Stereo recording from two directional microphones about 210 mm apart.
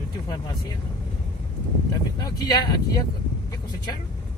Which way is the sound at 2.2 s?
20° left (ahead or behind).